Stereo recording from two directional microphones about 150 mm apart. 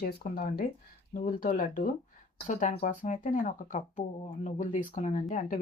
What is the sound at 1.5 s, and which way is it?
Speech, 60° left (ahead or behind).